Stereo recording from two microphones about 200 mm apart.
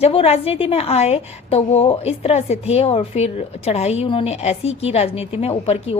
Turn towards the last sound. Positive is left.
turn(degrees=30)  # may be behind; listen again after turning